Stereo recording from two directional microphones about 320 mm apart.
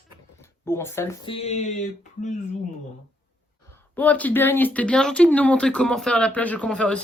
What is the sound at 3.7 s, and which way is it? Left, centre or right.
Speech, centre.